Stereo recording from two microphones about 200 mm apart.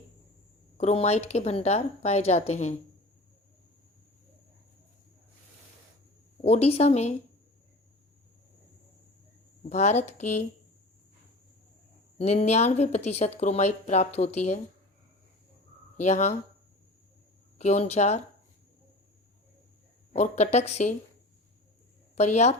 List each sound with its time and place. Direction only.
0.8 s speech: 35° left (ahead or behind)
6.4 s speech: 30° left (ahead or behind)
9.6 s speech: 35° left (ahead or behind)
12.1 s speech: 35° left (ahead or behind)
16.0 s speech: 35° left (ahead or behind)
17.6 s speech: 35° left (ahead or behind)
20.1 s speech: 35° left (ahead or behind)
22.1 s speech: 35° left (ahead or behind)